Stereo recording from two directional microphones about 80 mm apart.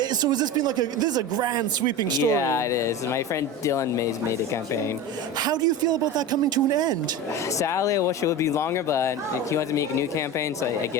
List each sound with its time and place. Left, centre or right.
0.0 s speech: right
2.3 s speech: left
5.4 s speech: right
7.6 s speech: left